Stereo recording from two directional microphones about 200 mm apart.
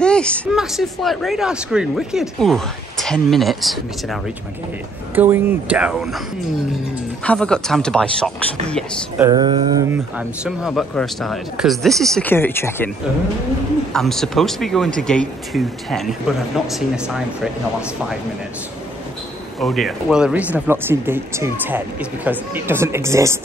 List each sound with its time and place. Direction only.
0.0 s speech: 5° left (ahead or behind)
7.2 s speech: 5° left (ahead or behind)
9.2 s a sound: 20° right (ahead or behind)
9.8 s speech: 5° right (ahead or behind); by 12.9 s 10° left (ahead or behind)
13.9 s speech: centre (ahead or behind)
19.6 s speech: centre (ahead or behind)